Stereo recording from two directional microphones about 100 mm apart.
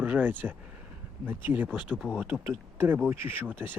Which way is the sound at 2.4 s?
25° right (ahead or behind).